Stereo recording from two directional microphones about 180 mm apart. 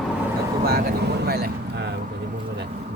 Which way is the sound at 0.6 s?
60° right (ahead or behind).